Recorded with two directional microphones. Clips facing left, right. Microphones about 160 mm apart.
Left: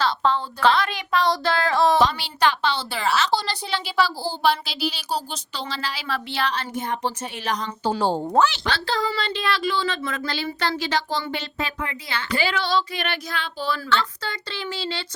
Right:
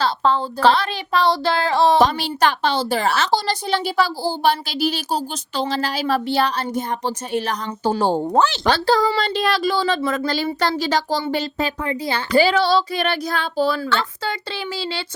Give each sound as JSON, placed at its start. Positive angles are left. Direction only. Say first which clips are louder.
{"t": 0.0, "sound": "speech", "louder": "right 3 dB", "side_deg": -35}
{"t": 2.0, "sound": "a woman's voice", "louder": "right 4 dB", "side_deg": -45}
{"t": 8.4, "sound": "speech", "louder": "right 8 dB", "side_deg": -40}